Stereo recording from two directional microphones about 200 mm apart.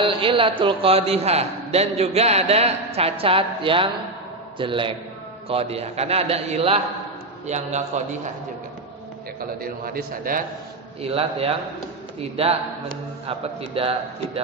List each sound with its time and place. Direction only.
0.0 s a man's voice: 25° right (ahead or behind)
9.4 s a man's voice: 50° right (ahead or behind)
11.1 s a man's voice: 30° right (ahead or behind)